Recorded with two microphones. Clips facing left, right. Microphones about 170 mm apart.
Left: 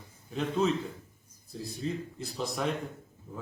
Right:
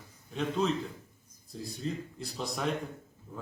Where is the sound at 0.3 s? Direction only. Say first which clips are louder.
Left 2 dB; centre (ahead or behind).